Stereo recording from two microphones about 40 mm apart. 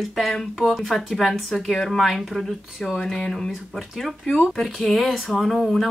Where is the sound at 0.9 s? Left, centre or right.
Centre.